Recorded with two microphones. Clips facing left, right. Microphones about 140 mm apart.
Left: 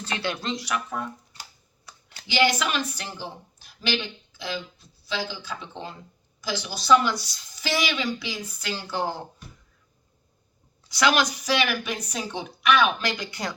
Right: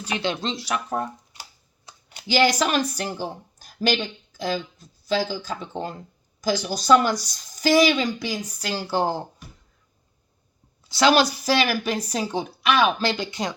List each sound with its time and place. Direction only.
0.0 s speech: 15° right (ahead or behind); by 1.1 s 35° right (ahead or behind)
1.9 s computer keyboard: 20° right (ahead or behind)
2.2 s speech: 40° right (ahead or behind)
10.8 s a woman's voice: 30° right (ahead or behind)